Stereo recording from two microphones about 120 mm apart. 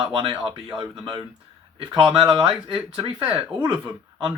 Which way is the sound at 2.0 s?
45° right (ahead or behind).